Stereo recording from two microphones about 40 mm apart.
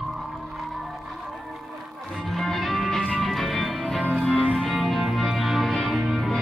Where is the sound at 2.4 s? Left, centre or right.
Centre.